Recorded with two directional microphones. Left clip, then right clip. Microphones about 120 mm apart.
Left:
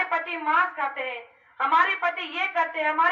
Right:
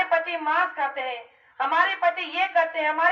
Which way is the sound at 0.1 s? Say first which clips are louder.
Right 1 dB; 30° right (ahead or behind).